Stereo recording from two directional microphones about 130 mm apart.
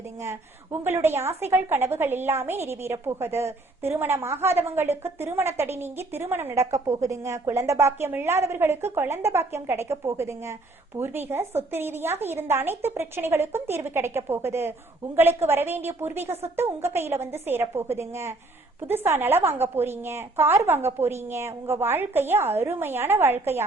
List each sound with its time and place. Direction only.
0.2 s a woman's voice: 20° right (ahead or behind)